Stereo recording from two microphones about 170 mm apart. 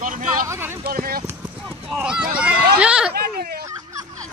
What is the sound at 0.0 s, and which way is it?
Speech, 50° right (ahead or behind).